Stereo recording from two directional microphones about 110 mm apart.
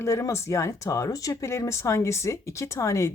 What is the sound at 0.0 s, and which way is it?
Speech, 25° left (ahead or behind).